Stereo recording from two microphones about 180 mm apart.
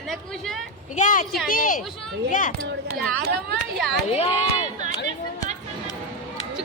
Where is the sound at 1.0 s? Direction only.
45° left (ahead or behind).